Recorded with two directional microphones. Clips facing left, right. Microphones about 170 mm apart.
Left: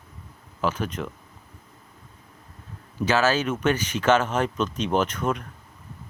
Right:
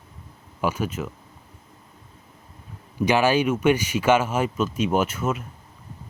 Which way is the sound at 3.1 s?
15° right (ahead or behind).